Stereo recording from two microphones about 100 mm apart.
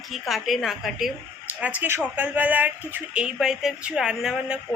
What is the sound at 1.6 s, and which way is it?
Speech, 15° right (ahead or behind).